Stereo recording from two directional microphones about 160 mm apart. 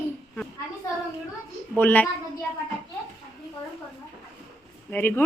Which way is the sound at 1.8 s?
10° left (ahead or behind).